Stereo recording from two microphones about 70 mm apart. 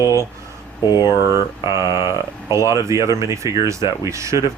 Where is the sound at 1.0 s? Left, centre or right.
Left.